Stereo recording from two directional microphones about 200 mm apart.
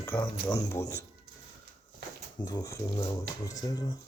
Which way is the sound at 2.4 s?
20° left (ahead or behind).